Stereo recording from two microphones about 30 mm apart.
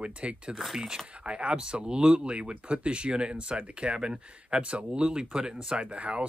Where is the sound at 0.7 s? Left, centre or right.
Centre.